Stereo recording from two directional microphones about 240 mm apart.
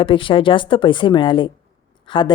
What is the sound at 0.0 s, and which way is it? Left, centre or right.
A woman's voice, left.